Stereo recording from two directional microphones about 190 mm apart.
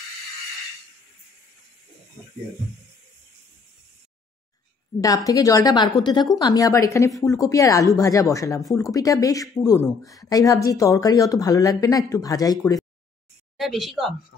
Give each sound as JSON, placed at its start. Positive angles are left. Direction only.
{"t": 5.0, "sound": "a woman's voice", "side_deg": 20}
{"t": 13.6, "sound": "speech", "side_deg": 0}